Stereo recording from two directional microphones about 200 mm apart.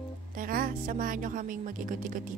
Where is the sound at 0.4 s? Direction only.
45° right (ahead or behind).